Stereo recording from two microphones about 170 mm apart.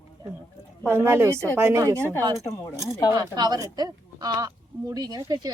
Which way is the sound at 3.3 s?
25° right (ahead or behind).